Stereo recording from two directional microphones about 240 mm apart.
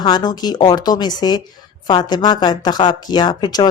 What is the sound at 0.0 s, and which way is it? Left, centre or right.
Speech, centre.